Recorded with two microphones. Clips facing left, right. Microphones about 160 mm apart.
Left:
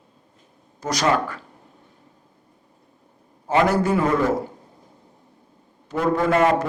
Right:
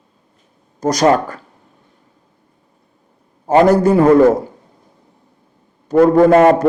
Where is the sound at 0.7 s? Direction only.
40° right (ahead or behind).